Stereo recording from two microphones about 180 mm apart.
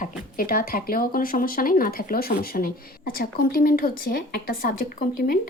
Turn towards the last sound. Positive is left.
turn(degrees=55)  # may be behind; listen again after turning